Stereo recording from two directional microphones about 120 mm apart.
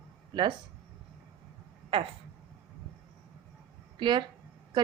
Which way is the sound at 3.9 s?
40° right (ahead or behind).